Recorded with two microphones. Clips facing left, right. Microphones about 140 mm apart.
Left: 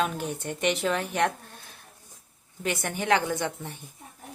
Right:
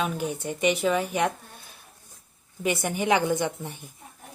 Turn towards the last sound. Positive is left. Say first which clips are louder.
# right 4 dB
turn(degrees=-15)  # may be behind; listen again after turning